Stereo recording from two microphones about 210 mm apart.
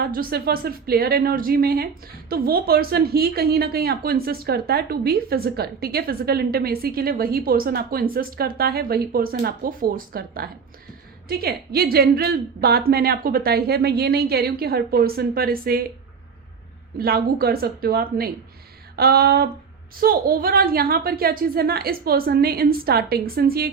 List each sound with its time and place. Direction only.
0.0 s a woman's voice: 45° right (ahead or behind)
17.0 s a woman's voice: 45° right (ahead or behind)